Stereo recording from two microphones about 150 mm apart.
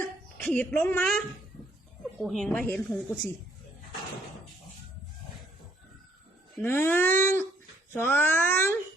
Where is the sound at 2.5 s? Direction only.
10° left (ahead or behind).